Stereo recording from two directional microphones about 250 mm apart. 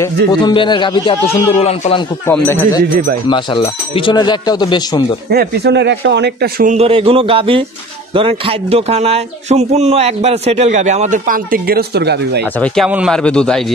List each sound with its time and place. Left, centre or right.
0.3 s a man's voice: centre
2.2 s speech: centre
3.3 s speech: centre
5.3 s speech: right
12.5 s speech: centre